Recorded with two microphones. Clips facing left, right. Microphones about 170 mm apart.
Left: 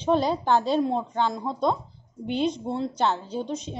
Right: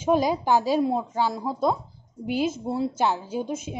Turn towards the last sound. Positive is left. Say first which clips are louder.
# right 1 dB
turn(degrees=-10)  # may be behind; listen again after turning